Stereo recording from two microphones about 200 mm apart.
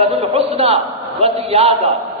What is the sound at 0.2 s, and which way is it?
A man's voice, 30° right (ahead or behind).